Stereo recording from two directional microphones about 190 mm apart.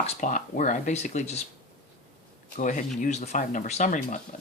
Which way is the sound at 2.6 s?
45° left (ahead or behind).